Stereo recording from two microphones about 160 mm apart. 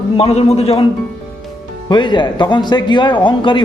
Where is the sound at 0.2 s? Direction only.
40° left (ahead or behind).